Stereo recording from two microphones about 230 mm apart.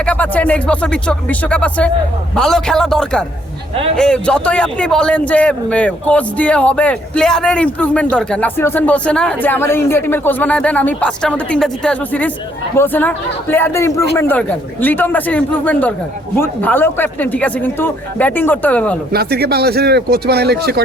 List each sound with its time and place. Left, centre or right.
0.0 s a man's voice: centre
19.1 s speech: right